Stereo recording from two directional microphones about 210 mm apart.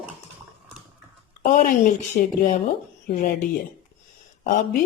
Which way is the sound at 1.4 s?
35° left (ahead or behind).